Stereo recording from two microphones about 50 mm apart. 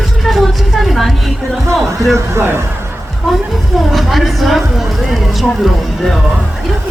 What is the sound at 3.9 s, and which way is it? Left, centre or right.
Music, centre.